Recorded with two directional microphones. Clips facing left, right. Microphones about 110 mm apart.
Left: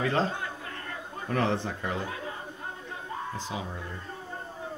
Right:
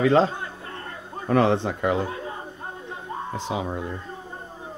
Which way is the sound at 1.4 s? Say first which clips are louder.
Right 6 dB; 80° right.